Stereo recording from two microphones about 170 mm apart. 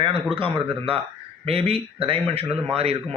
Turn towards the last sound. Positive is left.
turn(degrees=-35)  # may be behind; listen again after turning